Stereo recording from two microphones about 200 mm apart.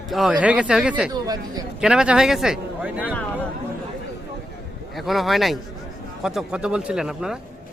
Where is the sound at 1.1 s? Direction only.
20° right (ahead or behind).